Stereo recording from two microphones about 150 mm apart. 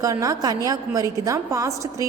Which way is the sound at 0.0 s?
20° right (ahead or behind).